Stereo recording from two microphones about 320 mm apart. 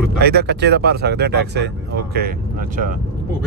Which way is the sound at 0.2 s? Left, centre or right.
Right.